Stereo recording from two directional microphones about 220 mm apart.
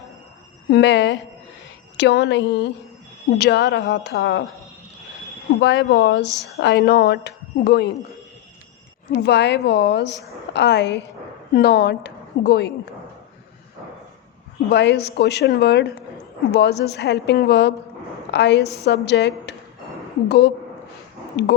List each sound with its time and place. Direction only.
0.7 s a woman's voice: 50° left (ahead or behind)
5.5 s a woman's voice: 55° left (ahead or behind)
6.2 s speech: 15° right (ahead or behind)
6.6 s a woman's voice: 50° left (ahead or behind)
9.1 s a woman's voice: 50° left (ahead or behind)
14.7 s a woman's voice: 50° left (ahead or behind)